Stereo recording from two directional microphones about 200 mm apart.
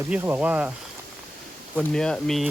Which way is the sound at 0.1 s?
10° right (ahead or behind).